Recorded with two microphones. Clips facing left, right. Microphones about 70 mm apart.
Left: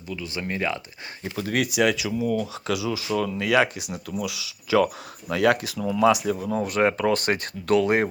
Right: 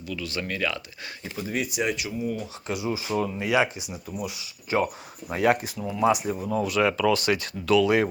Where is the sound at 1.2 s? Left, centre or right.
Left.